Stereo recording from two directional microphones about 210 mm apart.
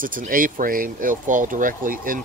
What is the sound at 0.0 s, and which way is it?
Speech, 40° right (ahead or behind).